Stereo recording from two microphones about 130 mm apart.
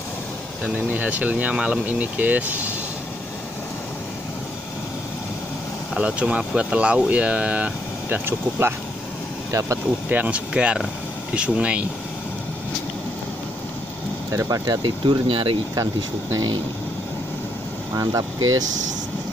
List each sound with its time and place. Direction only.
0.8 s speech: 10° right (ahead or behind)
5.9 s speech: 10° right (ahead or behind); by 9.8 s 25° right (ahead or behind)
10.0 s speech: 10° right (ahead or behind)
14.3 s speech: 25° right (ahead or behind)
14.8 s speech: 40° right (ahead or behind)
15.7 s speech: 25° right (ahead or behind)
17.9 s speech: 30° right (ahead or behind)